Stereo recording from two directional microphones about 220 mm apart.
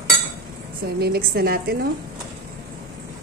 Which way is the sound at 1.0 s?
45° right (ahead or behind).